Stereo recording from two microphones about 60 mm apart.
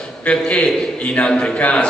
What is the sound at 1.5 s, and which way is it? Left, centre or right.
Speech, left.